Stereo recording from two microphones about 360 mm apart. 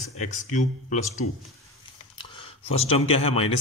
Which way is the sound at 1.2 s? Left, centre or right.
Left.